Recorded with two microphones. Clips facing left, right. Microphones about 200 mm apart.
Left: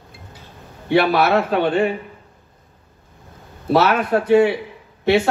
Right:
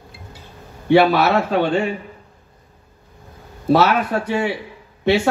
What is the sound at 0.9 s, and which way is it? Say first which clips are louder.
A man's voice: right 1 dB; 55° left (ahead or behind).